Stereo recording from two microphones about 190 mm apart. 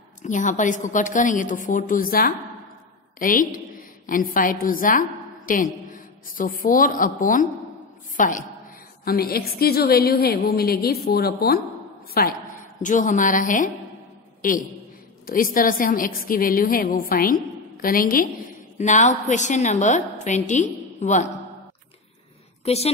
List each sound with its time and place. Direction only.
0.2 s a woman's voice: 40° left (ahead or behind)
12.8 s a woman's voice: 40° left (ahead or behind)
18.8 s a woman's voice: 40° left (ahead or behind)
22.7 s a woman's voice: 35° left (ahead or behind)